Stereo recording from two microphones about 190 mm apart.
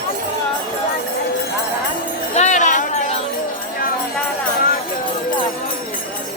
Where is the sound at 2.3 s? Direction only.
40° left (ahead or behind).